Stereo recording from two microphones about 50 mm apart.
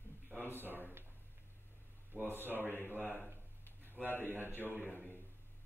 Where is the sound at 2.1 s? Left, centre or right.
Right.